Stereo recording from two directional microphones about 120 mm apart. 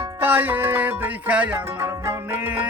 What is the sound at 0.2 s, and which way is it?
Music, 15° right (ahead or behind).